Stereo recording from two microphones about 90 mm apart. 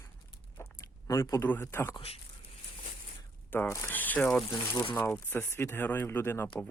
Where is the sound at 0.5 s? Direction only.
35° left (ahead or behind).